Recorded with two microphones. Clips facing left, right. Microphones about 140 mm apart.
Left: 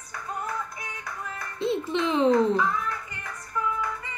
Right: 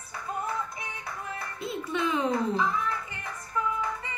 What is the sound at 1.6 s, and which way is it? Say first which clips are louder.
Music: left 5 dB; 25° left (ahead or behind).